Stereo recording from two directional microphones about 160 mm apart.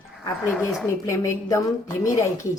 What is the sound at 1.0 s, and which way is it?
A woman's voice, 20° left (ahead or behind).